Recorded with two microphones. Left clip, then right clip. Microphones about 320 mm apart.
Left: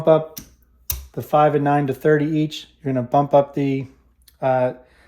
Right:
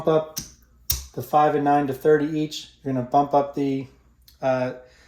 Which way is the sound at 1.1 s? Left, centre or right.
Left.